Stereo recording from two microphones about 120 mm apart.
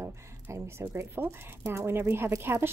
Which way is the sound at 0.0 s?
20° right (ahead or behind).